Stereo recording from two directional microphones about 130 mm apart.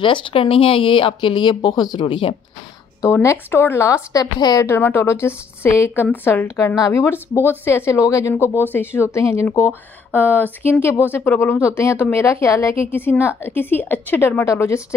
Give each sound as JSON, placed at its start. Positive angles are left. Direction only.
{"t": 0.0, "sound": "speech", "side_deg": 40}
{"t": 3.1, "sound": "speech", "side_deg": 20}
{"t": 4.6, "sound": "a woman's voice", "side_deg": 15}